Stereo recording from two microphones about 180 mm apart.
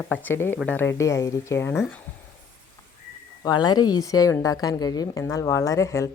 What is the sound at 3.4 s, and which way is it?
A woman's voice, 25° left (ahead or behind).